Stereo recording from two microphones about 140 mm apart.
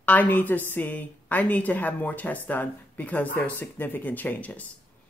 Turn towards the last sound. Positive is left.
turn(degrees=10)  # may be behind; listen again after turning